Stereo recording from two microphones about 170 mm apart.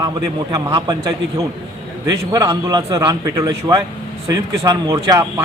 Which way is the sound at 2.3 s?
20° right (ahead or behind).